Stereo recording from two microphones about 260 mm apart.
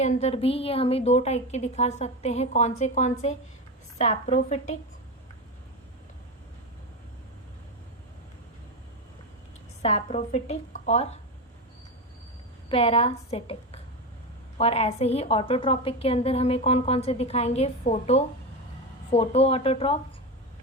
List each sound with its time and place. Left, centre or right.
0.0 s a woman's voice: left
9.8 s a woman's voice: left
12.6 s a woman's voice: left